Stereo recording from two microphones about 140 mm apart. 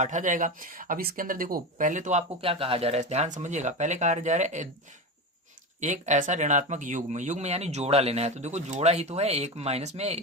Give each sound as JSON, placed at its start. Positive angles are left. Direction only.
{"t": 0.0, "sound": "speech", "side_deg": -60}
{"t": 2.4, "sound": "speech", "side_deg": -40}
{"t": 5.8, "sound": "speech", "side_deg": -60}